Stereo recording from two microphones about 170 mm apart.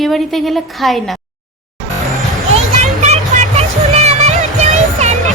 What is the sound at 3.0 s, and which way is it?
Music, 40° right (ahead or behind).